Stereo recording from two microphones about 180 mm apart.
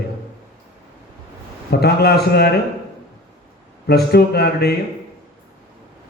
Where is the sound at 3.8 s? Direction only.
65° left (ahead or behind).